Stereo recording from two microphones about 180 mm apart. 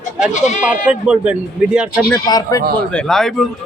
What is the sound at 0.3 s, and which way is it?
Speech, 40° left (ahead or behind).